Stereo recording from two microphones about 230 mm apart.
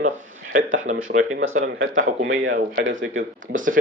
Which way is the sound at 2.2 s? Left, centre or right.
Right.